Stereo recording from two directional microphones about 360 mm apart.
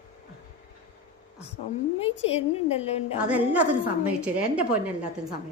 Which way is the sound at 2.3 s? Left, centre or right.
Centre.